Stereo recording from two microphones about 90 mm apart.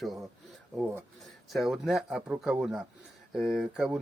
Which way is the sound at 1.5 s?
Centre (ahead or behind).